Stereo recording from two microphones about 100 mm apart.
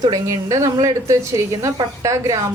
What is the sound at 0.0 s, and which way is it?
Speech, 35° right (ahead or behind).